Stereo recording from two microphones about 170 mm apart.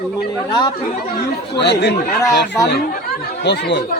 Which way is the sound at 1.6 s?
85° left.